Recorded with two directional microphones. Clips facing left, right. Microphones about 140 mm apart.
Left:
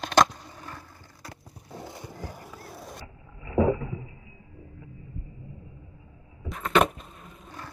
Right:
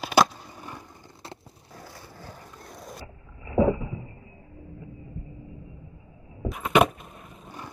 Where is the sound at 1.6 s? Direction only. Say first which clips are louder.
Left 5 dB; 20° left (ahead or behind); by 3.0 s centre (ahead or behind).